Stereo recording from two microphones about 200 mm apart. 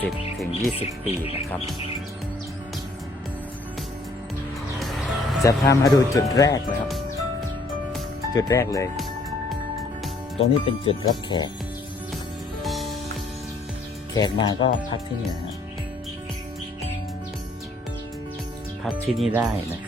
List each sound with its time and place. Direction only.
0.0 s speech: centre (ahead or behind)
0.8 s speech: 30° left (ahead or behind)
4.8 s music: centre (ahead or behind)
5.4 s speech: 15° left (ahead or behind)
8.3 s speech: 15° left (ahead or behind)
10.3 s speech: 30° left (ahead or behind)
12.6 s music: centre (ahead or behind)
14.2 s speech: 20° left (ahead or behind)
18.9 s speech: centre (ahead or behind)